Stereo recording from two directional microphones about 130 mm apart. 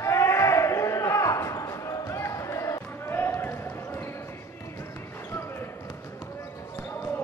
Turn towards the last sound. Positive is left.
turn(degrees=15)  # may be behind; listen again after turning